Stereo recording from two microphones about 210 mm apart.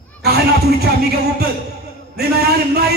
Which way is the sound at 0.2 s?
50° right (ahead or behind).